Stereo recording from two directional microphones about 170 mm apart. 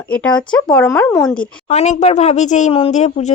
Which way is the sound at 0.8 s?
15° left (ahead or behind).